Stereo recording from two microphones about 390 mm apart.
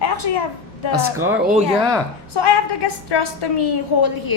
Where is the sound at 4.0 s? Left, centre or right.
Left.